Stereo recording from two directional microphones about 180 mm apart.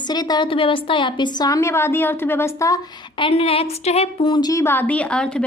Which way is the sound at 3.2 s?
30° left (ahead or behind).